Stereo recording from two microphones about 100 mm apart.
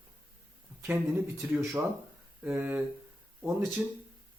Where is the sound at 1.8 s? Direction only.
20° right (ahead or behind).